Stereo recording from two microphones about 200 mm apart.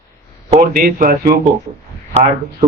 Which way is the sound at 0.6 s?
45° right (ahead or behind).